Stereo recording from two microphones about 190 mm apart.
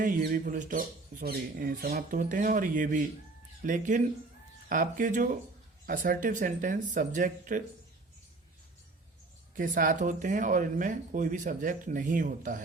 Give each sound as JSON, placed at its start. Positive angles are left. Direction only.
{"t": 0.0, "sound": "speech", "side_deg": -45}
{"t": 9.6, "sound": "speech", "side_deg": -45}